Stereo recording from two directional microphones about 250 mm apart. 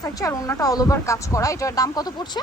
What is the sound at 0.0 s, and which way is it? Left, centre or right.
Speech, centre.